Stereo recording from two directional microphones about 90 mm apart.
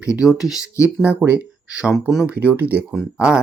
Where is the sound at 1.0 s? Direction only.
20° right (ahead or behind).